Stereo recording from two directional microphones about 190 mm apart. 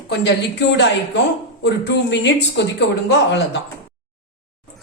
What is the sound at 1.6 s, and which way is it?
A woman's voice, 65° left (ahead or behind).